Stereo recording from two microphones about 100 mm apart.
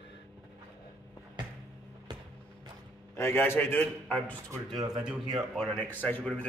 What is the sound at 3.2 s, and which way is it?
A man's voice, 25° left (ahead or behind).